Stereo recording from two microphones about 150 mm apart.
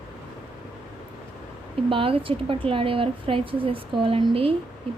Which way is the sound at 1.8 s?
35° right (ahead or behind).